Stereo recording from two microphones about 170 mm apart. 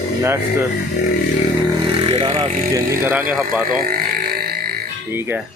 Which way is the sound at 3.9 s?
60° right (ahead or behind).